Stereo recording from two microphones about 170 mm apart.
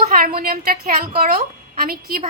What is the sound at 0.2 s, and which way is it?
Speech, 60° right (ahead or behind).